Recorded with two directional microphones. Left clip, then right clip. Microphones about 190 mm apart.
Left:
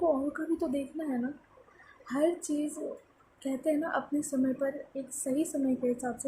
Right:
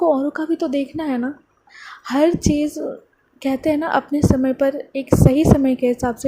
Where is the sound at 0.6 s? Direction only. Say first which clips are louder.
Right 12 dB; 45° right (ahead or behind).